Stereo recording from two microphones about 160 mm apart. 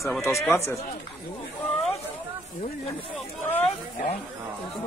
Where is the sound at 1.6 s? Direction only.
5° left (ahead or behind).